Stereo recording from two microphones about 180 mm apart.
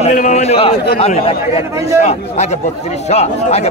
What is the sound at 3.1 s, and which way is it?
Speech, 35° left (ahead or behind).